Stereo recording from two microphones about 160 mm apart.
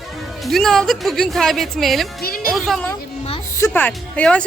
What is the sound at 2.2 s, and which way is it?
Music, 70° left (ahead or behind).